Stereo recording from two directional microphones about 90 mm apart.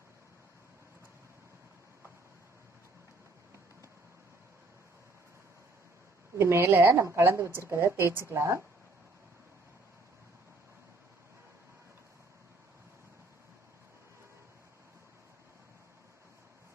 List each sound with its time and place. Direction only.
6.4 s a woman's voice: 25° right (ahead or behind)